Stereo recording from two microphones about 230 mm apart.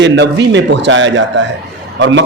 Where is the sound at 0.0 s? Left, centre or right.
Right.